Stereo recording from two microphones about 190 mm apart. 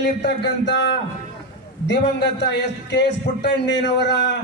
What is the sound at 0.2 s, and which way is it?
Speech, 65° left (ahead or behind).